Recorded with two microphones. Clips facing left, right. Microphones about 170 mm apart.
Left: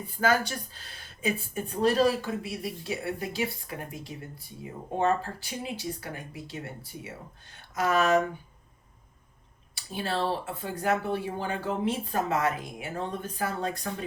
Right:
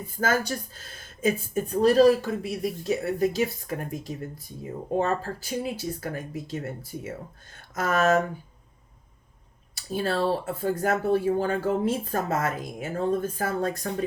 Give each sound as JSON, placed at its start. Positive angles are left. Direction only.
{"t": 0.2, "sound": "speech", "side_deg": -40}
{"t": 7.8, "sound": "speech", "side_deg": -45}
{"t": 9.7, "sound": "speech", "side_deg": -45}